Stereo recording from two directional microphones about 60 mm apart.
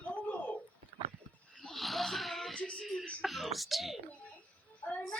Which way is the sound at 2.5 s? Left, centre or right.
Centre.